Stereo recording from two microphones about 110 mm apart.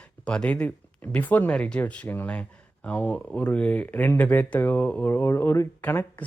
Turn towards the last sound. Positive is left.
turn(degrees=15)  # may be behind; listen again after turning